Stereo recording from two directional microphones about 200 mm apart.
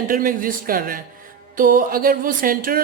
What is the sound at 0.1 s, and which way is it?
A woman's voice, 45° right (ahead or behind).